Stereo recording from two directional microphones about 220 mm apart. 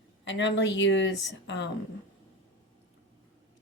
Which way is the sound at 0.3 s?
55° left (ahead or behind).